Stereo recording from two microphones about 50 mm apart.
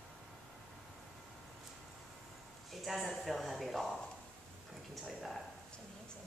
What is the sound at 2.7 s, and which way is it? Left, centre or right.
A woman's voice, centre.